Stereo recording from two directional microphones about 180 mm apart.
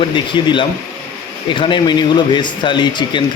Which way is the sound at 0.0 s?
25° left (ahead or behind).